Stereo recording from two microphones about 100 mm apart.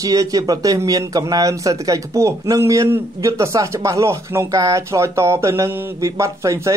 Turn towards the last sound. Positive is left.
turn(degrees=-30)  # may be behind; listen again after turning